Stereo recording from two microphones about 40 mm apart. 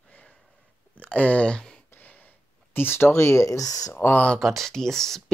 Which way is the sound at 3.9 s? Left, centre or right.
Left.